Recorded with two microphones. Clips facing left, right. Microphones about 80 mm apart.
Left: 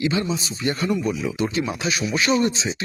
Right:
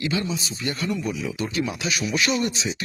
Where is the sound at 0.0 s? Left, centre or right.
Left.